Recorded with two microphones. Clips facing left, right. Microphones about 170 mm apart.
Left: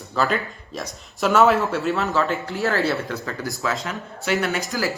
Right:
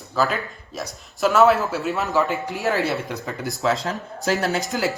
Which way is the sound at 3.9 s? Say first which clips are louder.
Right 1 dB; 35° right (ahead or behind).